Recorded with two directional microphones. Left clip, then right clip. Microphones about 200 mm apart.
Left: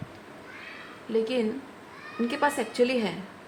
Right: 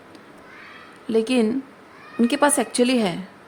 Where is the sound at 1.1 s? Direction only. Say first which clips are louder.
Right 6 dB; 55° right (ahead or behind).